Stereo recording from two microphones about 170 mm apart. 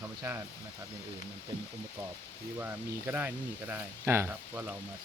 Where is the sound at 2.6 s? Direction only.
10° right (ahead or behind).